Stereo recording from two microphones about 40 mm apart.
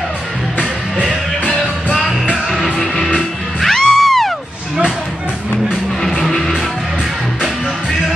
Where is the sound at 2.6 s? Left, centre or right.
Centre.